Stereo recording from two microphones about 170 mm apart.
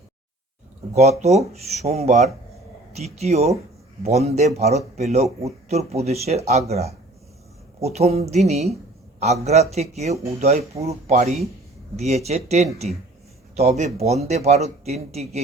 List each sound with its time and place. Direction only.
1.2 s speech: 40° right (ahead or behind)